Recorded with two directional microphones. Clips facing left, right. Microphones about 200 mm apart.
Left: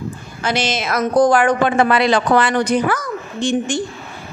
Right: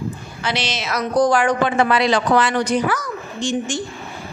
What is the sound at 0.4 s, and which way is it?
A woman's voice, 50° left (ahead or behind).